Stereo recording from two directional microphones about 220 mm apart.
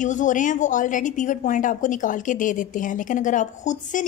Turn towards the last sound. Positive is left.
turn(degrees=35)  # may be behind; listen again after turning